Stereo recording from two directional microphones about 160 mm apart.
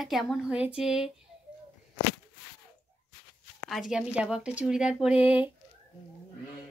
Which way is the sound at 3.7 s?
5° right (ahead or behind).